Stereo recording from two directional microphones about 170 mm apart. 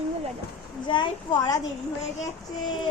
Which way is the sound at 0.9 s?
25° left (ahead or behind).